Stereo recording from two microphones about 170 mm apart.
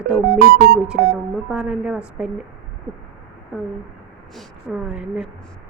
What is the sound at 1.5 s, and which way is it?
Speech, 5° right (ahead or behind).